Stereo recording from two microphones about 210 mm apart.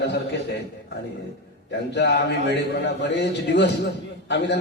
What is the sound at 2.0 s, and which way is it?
A man's voice, 55° left (ahead or behind).